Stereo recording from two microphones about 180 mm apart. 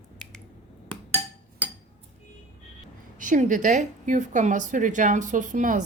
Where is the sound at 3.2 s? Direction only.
45° right (ahead or behind).